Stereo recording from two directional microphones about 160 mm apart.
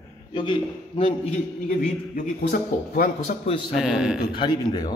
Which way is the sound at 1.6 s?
65° left (ahead or behind).